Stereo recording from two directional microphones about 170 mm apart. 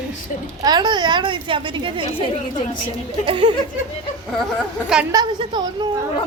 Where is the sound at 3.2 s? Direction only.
30° right (ahead or behind).